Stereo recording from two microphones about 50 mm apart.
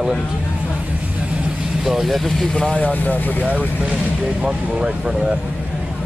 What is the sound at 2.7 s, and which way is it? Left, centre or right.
Speech, left.